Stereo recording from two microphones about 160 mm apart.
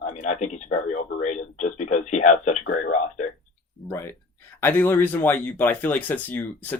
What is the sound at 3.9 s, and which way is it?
Speech, 15° left (ahead or behind).